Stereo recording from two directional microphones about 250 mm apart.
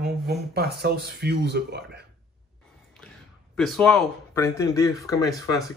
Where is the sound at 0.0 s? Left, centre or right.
Right.